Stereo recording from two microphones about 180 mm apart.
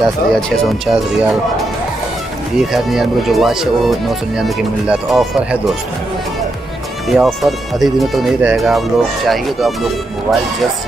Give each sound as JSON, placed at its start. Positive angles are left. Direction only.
{"t": 0.0, "sound": "speech", "side_deg": 0}
{"t": 2.6, "sound": "speech", "side_deg": 0}
{"t": 7.1, "sound": "speech", "side_deg": 0}